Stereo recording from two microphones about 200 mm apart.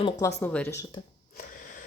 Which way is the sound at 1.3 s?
40° left (ahead or behind).